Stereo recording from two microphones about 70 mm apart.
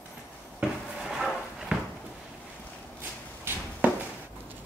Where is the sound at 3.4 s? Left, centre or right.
Right.